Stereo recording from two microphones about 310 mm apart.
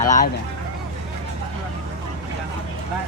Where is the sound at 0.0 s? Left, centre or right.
Left.